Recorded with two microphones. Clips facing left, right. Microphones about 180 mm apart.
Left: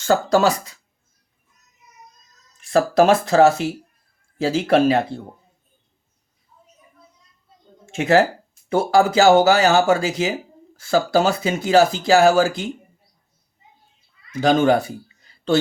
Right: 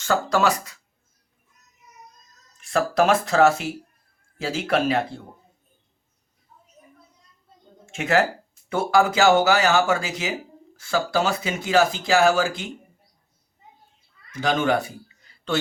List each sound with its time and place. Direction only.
0.0 s speech: 35° left (ahead or behind)
2.6 s speech: 35° left (ahead or behind)
7.9 s speech: 35° left (ahead or behind)
14.4 s speech: 35° left (ahead or behind)